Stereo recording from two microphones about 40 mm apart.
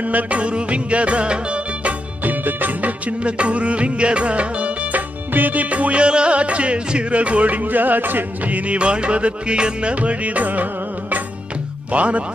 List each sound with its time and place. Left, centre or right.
0.0 s music: right
2.2 s music: right
3.1 s music: right
5.3 s music: right
8.7 s music: right
11.9 s music: right